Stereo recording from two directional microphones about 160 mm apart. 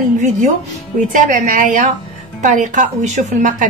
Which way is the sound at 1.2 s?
55° right (ahead or behind).